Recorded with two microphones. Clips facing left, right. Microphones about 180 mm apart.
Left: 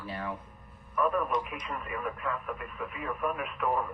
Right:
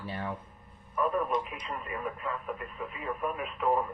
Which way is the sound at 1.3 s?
25° right (ahead or behind).